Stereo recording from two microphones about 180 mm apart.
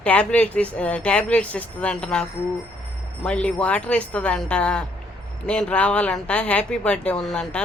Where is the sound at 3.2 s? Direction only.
5° left (ahead or behind).